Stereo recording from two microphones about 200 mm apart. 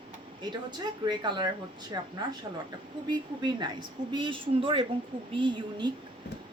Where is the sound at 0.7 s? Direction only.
20° right (ahead or behind).